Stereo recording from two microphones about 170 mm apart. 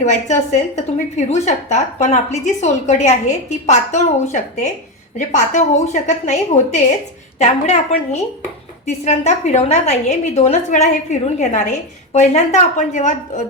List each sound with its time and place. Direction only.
0.0 s a woman's voice: 45° left (ahead or behind)